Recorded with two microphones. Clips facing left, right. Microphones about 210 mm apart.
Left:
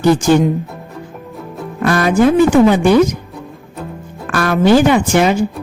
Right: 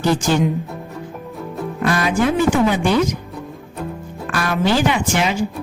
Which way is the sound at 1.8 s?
50° left (ahead or behind).